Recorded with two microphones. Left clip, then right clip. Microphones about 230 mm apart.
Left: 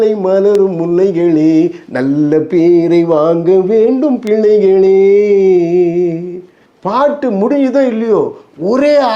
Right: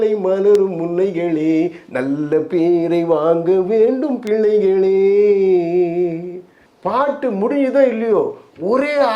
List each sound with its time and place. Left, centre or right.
0.0 s speech: left
0.6 s a sound: left
6.8 s speech: left